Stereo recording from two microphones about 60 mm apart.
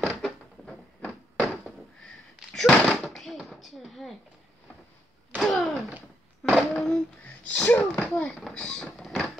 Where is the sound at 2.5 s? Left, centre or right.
Centre.